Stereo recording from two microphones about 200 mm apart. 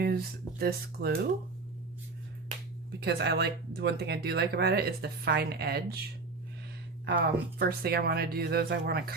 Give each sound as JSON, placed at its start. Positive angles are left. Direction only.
{"t": 0.6, "sound": "speech", "side_deg": -50}
{"t": 3.0, "sound": "speech", "side_deg": -55}